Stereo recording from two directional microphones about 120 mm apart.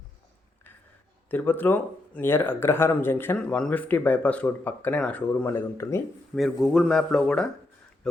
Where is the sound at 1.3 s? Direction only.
15° left (ahead or behind).